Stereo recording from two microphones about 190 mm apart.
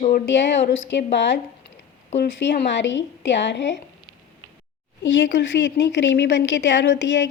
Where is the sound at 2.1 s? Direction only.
65° left (ahead or behind).